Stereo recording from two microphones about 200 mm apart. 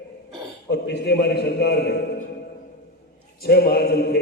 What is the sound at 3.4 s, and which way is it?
Speech, 50° left (ahead or behind).